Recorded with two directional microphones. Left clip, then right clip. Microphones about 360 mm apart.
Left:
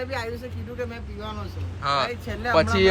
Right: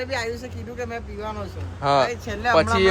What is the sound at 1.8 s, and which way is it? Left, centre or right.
Speech, centre.